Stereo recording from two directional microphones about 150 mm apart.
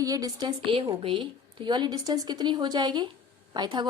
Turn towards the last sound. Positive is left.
turn(degrees=-30)  # may be behind; listen again after turning